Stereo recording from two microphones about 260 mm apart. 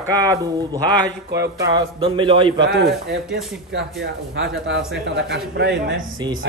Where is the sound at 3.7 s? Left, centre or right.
Right.